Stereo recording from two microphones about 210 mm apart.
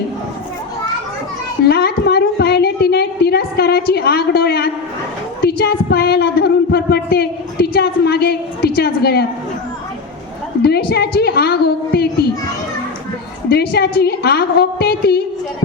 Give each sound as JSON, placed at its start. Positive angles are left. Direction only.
{"t": 1.6, "sound": "a woman's voice", "side_deg": 50}
{"t": 5.4, "sound": "a sound", "side_deg": 50}
{"t": 10.6, "sound": "a woman's voice", "side_deg": 50}
{"t": 13.5, "sound": "a woman's voice", "side_deg": 50}